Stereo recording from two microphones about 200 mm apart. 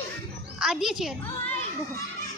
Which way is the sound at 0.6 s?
Centre (ahead or behind).